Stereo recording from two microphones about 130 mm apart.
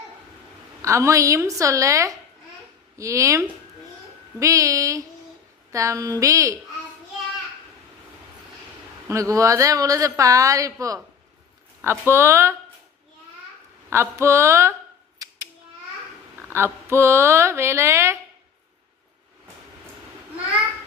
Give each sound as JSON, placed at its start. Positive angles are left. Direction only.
{"t": 0.8, "sound": "a woman's voice", "side_deg": -25}
{"t": 9.0, "sound": "a woman's voice", "side_deg": -25}
{"t": 13.9, "sound": "a woman's voice", "side_deg": -20}
{"t": 15.2, "sound": "a sound", "side_deg": -25}
{"t": 16.5, "sound": "a woman's voice", "side_deg": -20}